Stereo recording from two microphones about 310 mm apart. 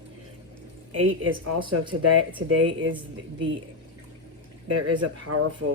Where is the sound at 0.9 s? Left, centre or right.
Right.